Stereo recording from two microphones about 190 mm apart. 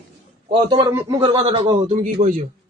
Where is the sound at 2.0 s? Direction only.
40° right (ahead or behind).